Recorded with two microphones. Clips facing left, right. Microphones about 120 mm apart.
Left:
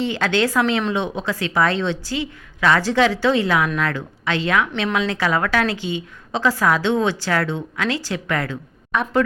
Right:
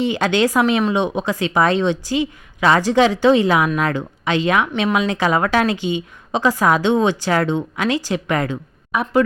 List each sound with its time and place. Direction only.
0.0 s speech: 15° right (ahead or behind)